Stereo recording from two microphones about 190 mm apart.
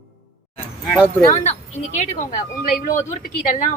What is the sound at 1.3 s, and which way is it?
A woman's voice, 35° left (ahead or behind).